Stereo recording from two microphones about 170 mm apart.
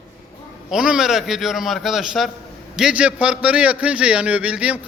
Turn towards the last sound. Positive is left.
turn(degrees=-5)  # may be behind; listen again after turning